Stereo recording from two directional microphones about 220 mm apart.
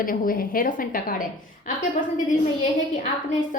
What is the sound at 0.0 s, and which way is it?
A woman's voice, 40° left (ahead or behind).